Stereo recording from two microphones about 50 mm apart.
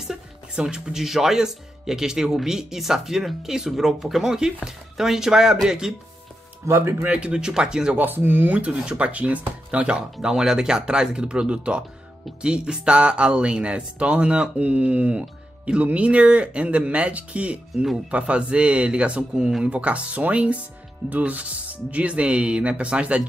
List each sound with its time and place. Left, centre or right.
0.0 s speech: centre
6.6 s speech: right
7.1 s speech: right
8.0 s speech: right
8.5 s speech: right
10.2 s speech: centre